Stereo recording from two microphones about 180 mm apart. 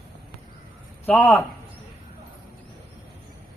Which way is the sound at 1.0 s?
5° left (ahead or behind).